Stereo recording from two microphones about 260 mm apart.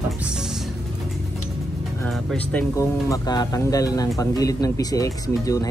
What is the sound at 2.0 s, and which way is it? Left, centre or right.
Speech, centre.